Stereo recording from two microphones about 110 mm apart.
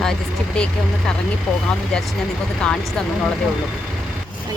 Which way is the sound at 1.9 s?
5° left (ahead or behind).